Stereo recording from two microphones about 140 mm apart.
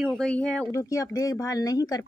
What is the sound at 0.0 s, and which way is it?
Speech, 5° left (ahead or behind).